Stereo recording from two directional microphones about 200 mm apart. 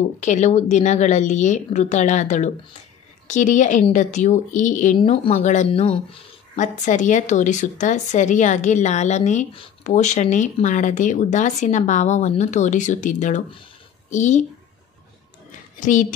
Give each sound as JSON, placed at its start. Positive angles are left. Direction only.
{"t": 0.2, "sound": "speech", "side_deg": 35}
{"t": 4.9, "sound": "speech", "side_deg": 30}
{"t": 15.8, "sound": "speech", "side_deg": 40}